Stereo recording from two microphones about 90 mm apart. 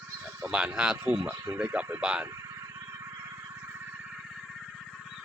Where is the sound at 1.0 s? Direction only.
25° right (ahead or behind).